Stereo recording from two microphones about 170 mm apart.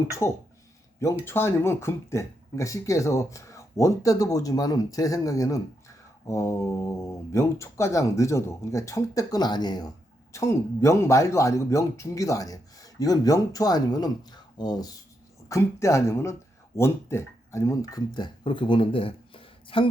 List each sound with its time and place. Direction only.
0.2 s speech: 15° left (ahead or behind); by 19.9 s 30° left (ahead or behind)